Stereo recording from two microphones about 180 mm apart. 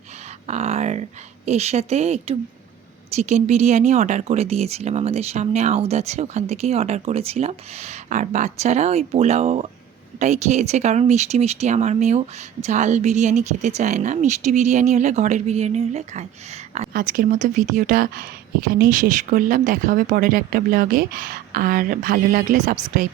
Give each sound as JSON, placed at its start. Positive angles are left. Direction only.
{"t": 0.4, "sound": "speech", "side_deg": -35}
{"t": 16.9, "sound": "speech", "side_deg": -50}